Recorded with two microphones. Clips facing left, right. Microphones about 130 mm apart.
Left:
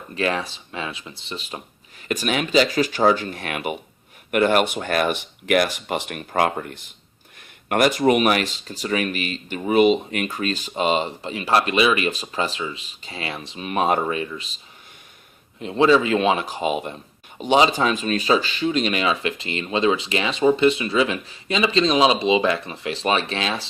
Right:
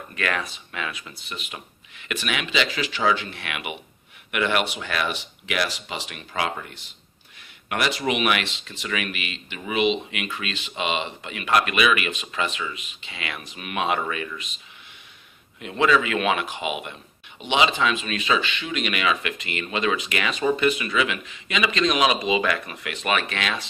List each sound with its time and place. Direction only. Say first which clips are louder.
0.1 s speech: left 4 dB; 30° left (ahead or behind)